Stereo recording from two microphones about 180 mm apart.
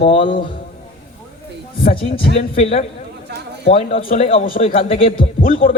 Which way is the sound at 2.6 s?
35° left (ahead or behind).